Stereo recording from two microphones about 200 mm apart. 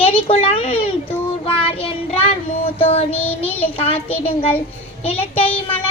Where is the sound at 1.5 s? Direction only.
30° left (ahead or behind).